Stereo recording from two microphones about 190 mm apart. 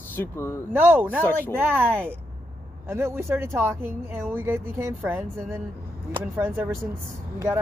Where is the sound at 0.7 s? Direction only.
10° right (ahead or behind).